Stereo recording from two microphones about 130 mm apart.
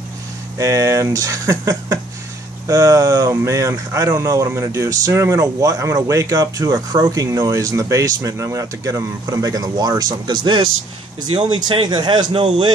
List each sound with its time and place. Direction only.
0.6 s speech: 25° right (ahead or behind)